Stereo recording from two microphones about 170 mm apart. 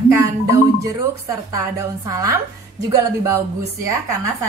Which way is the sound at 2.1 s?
20° right (ahead or behind).